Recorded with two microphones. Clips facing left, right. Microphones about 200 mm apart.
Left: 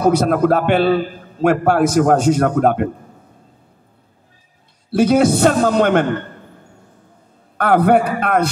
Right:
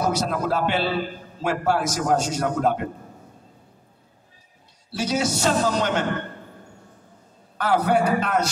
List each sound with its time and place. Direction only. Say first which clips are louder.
0.1 s a man's voice: left 9 dB; 55° left (ahead or behind)
4.9 s a man's voice: left 11 dB; 55° left (ahead or behind)
7.5 s a man's voice: left 7 dB; 55° left (ahead or behind)